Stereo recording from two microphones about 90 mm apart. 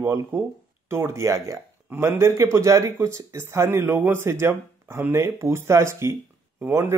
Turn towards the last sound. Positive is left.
turn(degrees=-30)  # may be behind; listen again after turning